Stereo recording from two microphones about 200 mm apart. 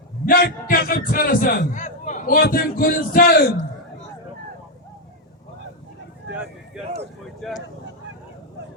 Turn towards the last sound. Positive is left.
turn(degrees=5)  # may be behind; listen again after turning